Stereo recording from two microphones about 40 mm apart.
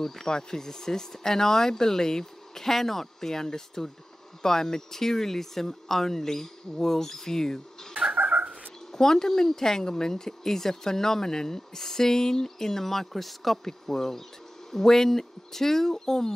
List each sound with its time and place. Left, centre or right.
0.0 s speech: centre
8.2 s bird: right
8.9 s speech: centre